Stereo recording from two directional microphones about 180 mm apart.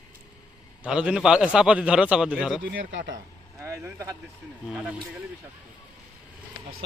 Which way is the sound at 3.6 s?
15° right (ahead or behind).